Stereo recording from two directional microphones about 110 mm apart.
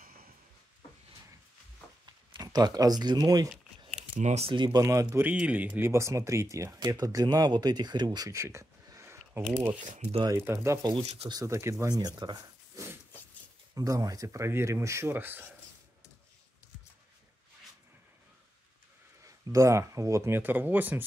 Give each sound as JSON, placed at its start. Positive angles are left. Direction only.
{"t": 2.3, "sound": "speech", "side_deg": -35}
{"t": 4.2, "sound": "speech", "side_deg": -90}
{"t": 4.5, "sound": "speech", "side_deg": -40}
{"t": 4.8, "sound": "speech", "side_deg": -25}
{"t": 5.3, "sound": "speech", "side_deg": -10}
{"t": 19.2, "sound": "speech", "side_deg": -30}